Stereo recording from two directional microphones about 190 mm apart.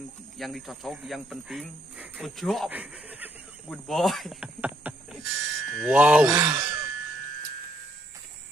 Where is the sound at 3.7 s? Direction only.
Centre (ahead or behind).